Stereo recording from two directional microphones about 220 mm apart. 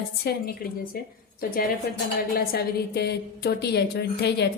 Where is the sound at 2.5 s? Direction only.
45° left (ahead or behind).